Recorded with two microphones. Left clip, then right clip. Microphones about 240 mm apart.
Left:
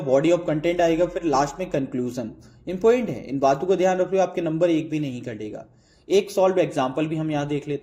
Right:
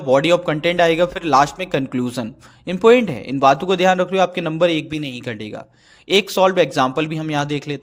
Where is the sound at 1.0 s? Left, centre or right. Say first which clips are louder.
Right 6 dB; right.